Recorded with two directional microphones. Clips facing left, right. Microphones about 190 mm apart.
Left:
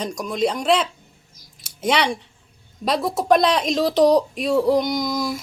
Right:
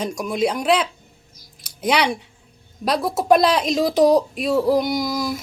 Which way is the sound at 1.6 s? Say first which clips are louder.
Right 1 dB; centre (ahead or behind).